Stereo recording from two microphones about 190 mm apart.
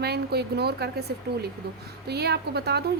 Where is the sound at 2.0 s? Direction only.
60° right (ahead or behind).